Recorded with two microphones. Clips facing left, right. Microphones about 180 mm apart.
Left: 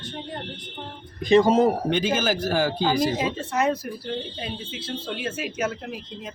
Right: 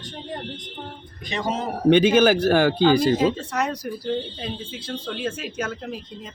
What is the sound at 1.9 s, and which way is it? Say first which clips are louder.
Speech: right 8 dB; 65° right (ahead or behind).